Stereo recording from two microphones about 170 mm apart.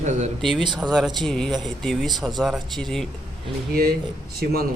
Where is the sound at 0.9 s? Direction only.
Centre (ahead or behind).